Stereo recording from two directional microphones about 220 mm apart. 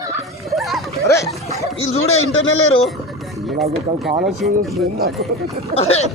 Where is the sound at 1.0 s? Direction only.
15° left (ahead or behind).